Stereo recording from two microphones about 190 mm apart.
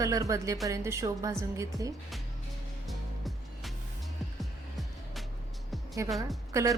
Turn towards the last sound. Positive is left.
turn(degrees=-15)  # may be behind; listen again after turning